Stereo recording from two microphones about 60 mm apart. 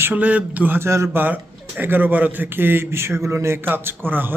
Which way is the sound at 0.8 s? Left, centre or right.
Right.